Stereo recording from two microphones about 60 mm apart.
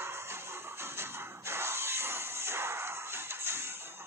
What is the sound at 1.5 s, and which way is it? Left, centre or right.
Music, right.